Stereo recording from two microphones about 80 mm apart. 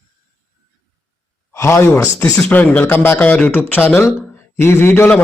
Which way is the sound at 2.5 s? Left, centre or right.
Left.